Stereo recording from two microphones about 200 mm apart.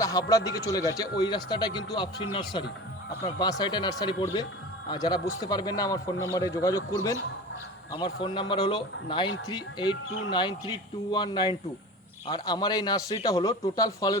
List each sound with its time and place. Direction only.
0.0 s a man's voice: 15° left (ahead or behind)
7.9 s a man's voice: 25° left (ahead or behind)